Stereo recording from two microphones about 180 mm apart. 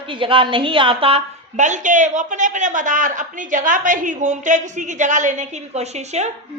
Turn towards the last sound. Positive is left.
turn(degrees=-40)  # may be behind; listen again after turning